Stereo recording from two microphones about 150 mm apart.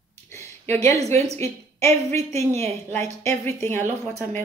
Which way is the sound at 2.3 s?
45° right (ahead or behind).